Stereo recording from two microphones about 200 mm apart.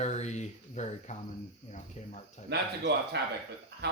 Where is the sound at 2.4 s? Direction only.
55° right (ahead or behind).